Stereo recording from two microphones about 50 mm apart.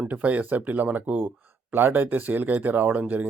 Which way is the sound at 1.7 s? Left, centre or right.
Right.